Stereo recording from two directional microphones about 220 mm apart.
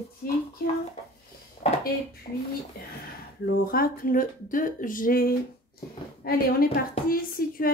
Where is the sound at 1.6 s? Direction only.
30° left (ahead or behind).